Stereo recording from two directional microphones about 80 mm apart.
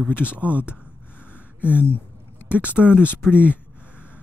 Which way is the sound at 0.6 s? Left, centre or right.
Centre.